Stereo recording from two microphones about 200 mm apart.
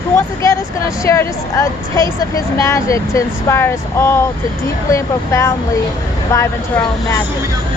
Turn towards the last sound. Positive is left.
turn(degrees=15)  # may be behind; listen again after turning